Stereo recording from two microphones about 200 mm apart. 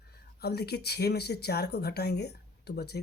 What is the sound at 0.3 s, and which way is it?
Speech, 55° left (ahead or behind).